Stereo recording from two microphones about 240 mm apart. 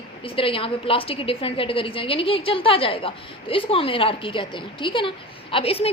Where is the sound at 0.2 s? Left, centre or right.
Left.